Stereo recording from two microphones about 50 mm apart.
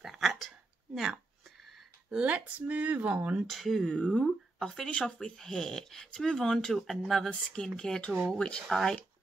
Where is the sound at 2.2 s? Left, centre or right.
Right.